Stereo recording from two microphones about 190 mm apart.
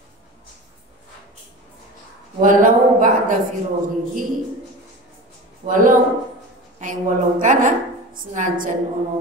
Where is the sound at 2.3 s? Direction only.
45° right (ahead or behind).